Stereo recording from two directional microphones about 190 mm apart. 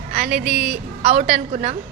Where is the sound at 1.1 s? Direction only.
35° right (ahead or behind).